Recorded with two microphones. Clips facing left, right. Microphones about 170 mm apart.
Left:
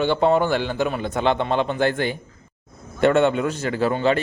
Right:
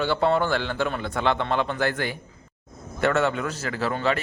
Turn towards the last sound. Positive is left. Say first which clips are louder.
# left 5 dB
turn(degrees=25)  # may be behind; listen again after turning